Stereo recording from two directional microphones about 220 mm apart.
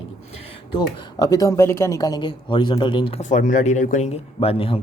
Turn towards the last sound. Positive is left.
turn(degrees=25)  # may be behind; listen again after turning